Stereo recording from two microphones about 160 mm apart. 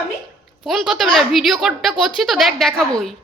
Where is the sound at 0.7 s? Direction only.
Centre (ahead or behind).